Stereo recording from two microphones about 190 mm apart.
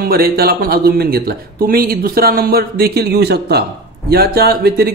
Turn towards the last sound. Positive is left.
turn(degrees=-55)  # may be behind; listen again after turning